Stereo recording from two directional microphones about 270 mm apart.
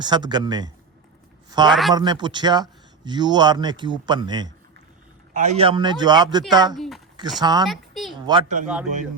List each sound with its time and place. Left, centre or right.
0.0 s speech: centre
1.5 s a sound: centre
1.7 s speech: centre
2.0 s speech: centre
5.3 s speech: right
6.7 s a sound: centre
7.2 s a woman's voice: centre
8.6 s speech: centre